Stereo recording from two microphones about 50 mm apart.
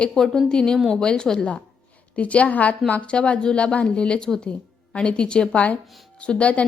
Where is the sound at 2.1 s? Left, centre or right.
Left.